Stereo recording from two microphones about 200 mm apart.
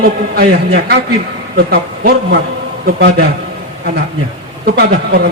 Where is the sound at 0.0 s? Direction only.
50° right (ahead or behind).